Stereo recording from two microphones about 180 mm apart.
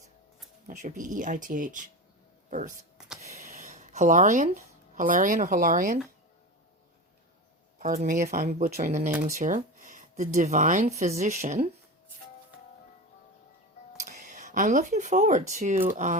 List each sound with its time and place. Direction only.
0.7 s speech: 45° right (ahead or behind)
7.8 s speech: 50° right (ahead or behind)
14.0 s speech: 40° right (ahead or behind)